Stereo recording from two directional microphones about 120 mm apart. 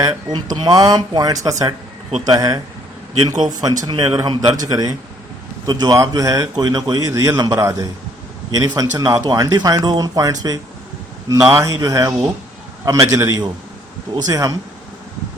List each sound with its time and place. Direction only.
0.0 s a man's voice: 35° right (ahead or behind)